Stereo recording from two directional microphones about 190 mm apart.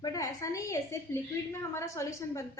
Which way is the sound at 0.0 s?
20° left (ahead or behind).